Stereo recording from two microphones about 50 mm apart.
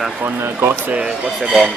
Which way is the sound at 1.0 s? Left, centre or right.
Centre.